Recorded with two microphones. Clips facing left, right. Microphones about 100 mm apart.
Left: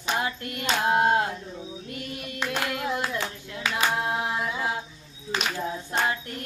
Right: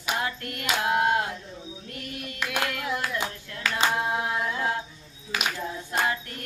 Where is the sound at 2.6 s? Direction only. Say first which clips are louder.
Left 1 dB; 20° left (ahead or behind).